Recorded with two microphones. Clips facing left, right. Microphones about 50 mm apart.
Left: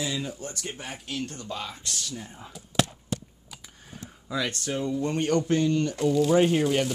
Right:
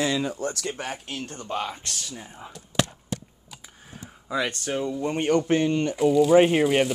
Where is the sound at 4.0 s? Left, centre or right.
Centre.